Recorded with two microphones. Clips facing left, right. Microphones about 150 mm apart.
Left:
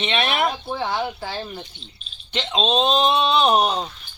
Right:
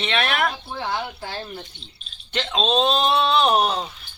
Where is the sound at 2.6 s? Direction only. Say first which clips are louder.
Left 1 dB; 10° left (ahead or behind).